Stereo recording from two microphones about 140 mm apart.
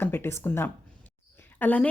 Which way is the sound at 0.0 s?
15° left (ahead or behind).